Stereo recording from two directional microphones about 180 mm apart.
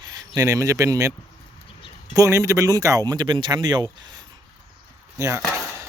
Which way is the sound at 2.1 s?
15° right (ahead or behind).